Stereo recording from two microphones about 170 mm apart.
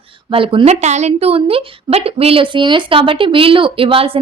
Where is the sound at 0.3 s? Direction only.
30° right (ahead or behind).